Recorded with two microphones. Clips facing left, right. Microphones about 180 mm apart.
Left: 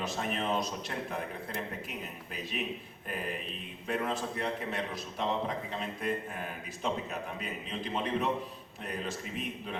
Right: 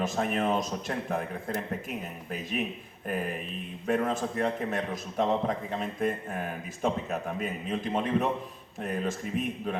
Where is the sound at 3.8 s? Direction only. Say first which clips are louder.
Right 5 dB; 45° right (ahead or behind).